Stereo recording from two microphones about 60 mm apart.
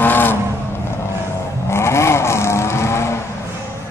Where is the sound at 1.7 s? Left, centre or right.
Left.